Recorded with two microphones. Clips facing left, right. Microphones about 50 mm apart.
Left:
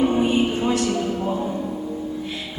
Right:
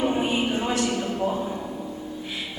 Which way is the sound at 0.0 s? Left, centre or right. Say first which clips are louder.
Left 5 dB; centre.